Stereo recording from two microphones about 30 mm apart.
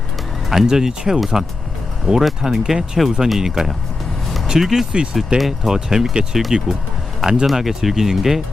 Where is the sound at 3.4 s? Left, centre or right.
Centre.